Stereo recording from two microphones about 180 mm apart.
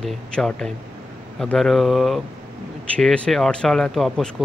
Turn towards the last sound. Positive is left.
turn(degrees=0)  # may be behind; listen again after turning